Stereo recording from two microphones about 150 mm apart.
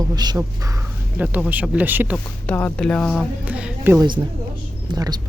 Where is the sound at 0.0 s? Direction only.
25° right (ahead or behind).